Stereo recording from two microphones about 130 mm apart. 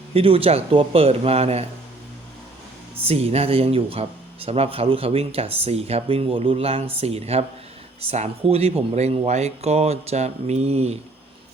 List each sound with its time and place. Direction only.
0.1 s speech: 45° right (ahead or behind)
3.0 s speech: 50° right (ahead or behind)